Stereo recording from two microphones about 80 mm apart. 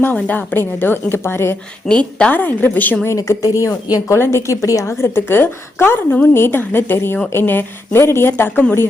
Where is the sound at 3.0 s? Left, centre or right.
Left.